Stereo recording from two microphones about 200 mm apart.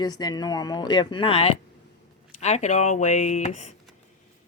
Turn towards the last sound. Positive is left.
turn(degrees=35)  # may be behind; listen again after turning